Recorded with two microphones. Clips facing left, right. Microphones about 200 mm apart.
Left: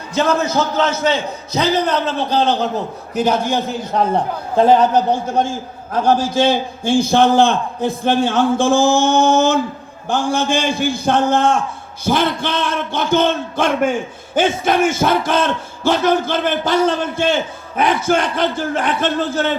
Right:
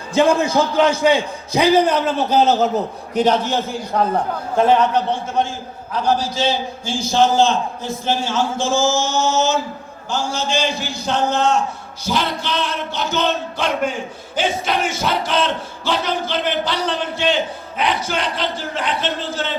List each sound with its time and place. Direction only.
0.2 s a man's voice: 15° right (ahead or behind)
3.2 s a man's voice: 10° left (ahead or behind); by 5.5 s 40° left (ahead or behind)
5.9 s a man's voice: 50° left (ahead or behind)